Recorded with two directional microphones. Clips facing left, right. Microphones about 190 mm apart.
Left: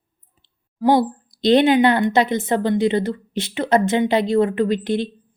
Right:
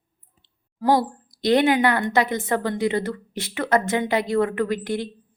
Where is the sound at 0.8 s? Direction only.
25° left (ahead or behind).